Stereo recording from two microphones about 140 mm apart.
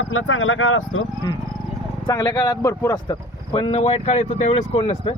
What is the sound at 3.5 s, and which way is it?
Speech, 45° left (ahead or behind).